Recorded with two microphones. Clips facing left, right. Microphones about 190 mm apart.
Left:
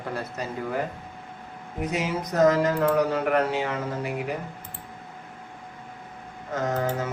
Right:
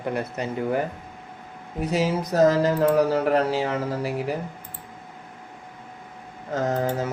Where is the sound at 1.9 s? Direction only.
30° right (ahead or behind).